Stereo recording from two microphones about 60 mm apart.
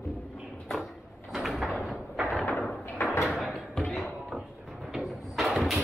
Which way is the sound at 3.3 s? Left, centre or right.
Centre.